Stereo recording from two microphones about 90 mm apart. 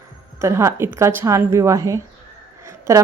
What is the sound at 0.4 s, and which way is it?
A woman's voice, 30° right (ahead or behind).